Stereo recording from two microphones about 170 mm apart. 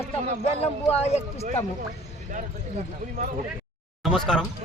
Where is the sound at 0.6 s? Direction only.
40° left (ahead or behind).